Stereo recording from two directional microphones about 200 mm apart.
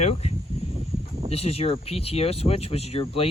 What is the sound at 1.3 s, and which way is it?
Speech, 30° left (ahead or behind).